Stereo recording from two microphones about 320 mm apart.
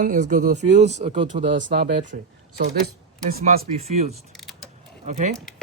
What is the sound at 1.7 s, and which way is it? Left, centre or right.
Speech, right.